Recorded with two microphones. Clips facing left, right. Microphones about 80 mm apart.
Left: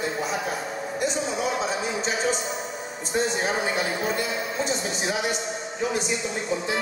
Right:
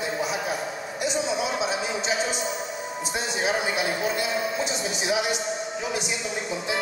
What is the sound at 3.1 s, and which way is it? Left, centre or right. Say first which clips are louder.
Speech: left 2 dB; centre.